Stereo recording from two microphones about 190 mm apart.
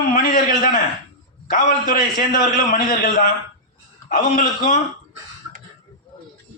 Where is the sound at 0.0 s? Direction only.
45° left (ahead or behind).